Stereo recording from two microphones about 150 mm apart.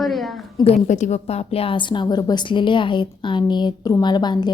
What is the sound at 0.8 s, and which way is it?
A woman's voice, 55° left (ahead or behind).